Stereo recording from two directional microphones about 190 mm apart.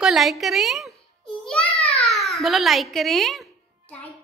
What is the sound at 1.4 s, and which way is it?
Babbling, 5° left (ahead or behind).